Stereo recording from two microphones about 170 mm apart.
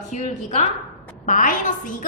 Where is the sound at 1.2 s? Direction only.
50° left (ahead or behind).